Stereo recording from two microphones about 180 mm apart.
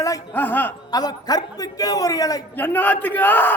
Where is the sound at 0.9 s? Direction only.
20° left (ahead or behind).